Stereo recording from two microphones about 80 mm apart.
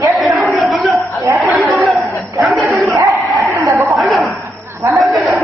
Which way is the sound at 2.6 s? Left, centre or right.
Centre.